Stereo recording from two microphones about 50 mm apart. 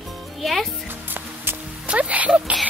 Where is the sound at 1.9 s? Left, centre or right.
Right.